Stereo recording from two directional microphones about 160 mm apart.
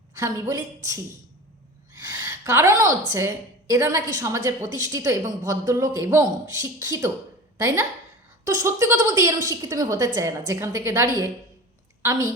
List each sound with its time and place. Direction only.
0.1 s a woman's voice: 20° right (ahead or behind)
1.9 s a sound: 20° right (ahead or behind)
3.1 s a woman's voice: 20° right (ahead or behind)
8.4 s a woman's voice: 20° right (ahead or behind)